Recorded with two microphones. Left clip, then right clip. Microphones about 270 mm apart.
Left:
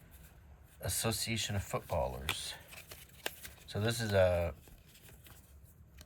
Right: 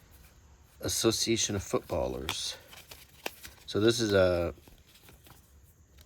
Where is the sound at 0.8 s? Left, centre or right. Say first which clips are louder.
Right 8 dB; centre.